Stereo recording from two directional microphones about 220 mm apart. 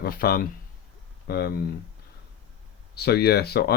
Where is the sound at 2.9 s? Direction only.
45° left (ahead or behind).